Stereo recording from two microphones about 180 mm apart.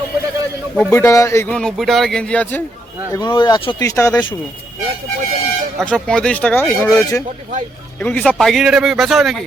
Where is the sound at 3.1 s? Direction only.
25° left (ahead or behind).